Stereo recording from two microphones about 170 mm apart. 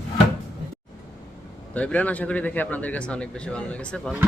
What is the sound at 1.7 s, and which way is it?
Speech, 10° left (ahead or behind).